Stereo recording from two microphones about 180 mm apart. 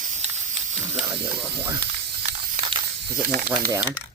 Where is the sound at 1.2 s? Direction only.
5° right (ahead or behind).